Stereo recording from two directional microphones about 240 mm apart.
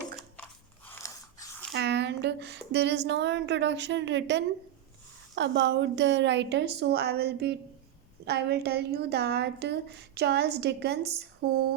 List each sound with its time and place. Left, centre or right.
0.9 s biting: centre
1.7 s speech: right